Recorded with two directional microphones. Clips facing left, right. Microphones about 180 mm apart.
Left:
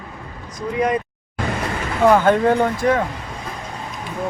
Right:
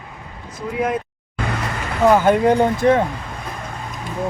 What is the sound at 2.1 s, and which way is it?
Speech, 10° right (ahead or behind).